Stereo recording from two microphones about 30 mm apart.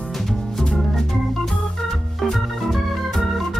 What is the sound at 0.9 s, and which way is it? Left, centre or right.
Organ, centre.